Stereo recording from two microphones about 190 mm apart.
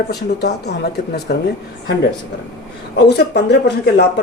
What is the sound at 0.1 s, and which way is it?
Speech, 60° left (ahead or behind).